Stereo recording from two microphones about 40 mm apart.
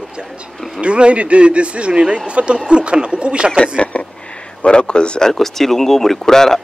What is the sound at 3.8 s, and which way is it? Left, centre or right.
Speech, left.